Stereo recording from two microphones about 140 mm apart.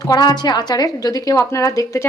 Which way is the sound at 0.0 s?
30° left (ahead or behind).